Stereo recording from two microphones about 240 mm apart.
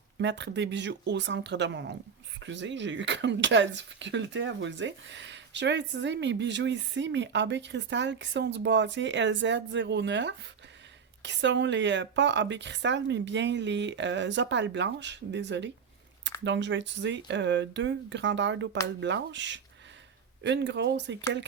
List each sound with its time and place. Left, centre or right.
0.2 s speech: right